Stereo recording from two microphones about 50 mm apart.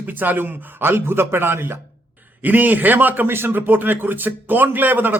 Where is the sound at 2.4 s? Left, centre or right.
Right.